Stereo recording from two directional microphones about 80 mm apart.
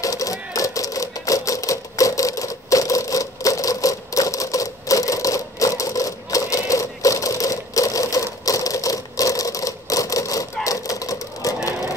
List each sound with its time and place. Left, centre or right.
0.0 s typewriter: left